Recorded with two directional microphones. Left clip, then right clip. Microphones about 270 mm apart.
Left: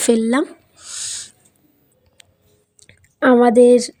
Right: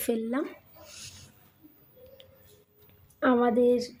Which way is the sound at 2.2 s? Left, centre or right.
Left.